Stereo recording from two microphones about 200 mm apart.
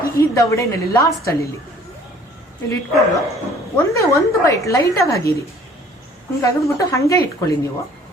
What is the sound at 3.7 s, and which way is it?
Speech, 15° left (ahead or behind).